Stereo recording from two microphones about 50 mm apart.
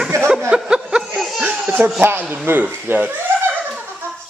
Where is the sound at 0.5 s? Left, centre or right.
Centre.